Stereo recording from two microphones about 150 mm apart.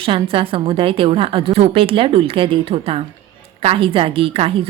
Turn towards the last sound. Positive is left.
turn(degrees=-40)  # may be behind; listen again after turning